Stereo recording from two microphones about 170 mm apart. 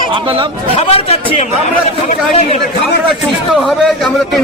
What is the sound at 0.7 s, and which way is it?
Speech, 35° left (ahead or behind).